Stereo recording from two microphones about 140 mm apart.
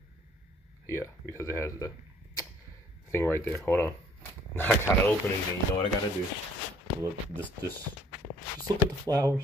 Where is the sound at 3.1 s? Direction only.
15° left (ahead or behind).